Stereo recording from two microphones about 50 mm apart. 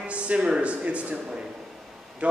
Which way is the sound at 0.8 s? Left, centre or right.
Right.